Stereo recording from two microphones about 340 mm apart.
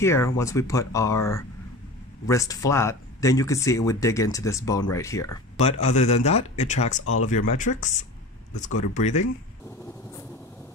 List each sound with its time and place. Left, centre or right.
0.0 s speech: centre